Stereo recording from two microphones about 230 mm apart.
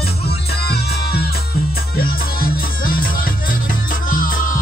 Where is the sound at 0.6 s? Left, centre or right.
Left.